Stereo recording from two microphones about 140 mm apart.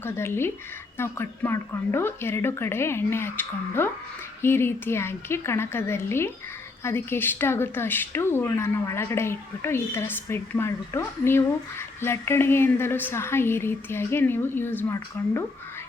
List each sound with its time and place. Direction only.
0.0 s speech: 15° left (ahead or behind)